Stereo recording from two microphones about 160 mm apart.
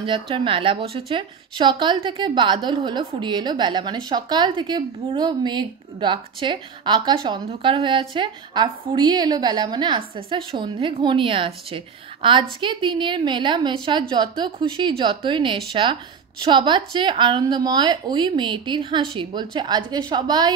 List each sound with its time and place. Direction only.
0.0 s a woman's voice: 30° right (ahead or behind)